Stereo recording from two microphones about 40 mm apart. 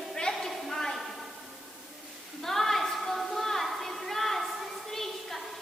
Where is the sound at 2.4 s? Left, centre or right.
Centre.